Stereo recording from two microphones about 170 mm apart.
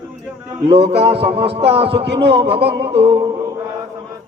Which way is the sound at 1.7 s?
35° right (ahead or behind).